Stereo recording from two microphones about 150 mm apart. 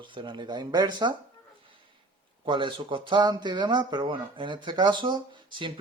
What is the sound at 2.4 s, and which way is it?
Speech, 30° right (ahead or behind).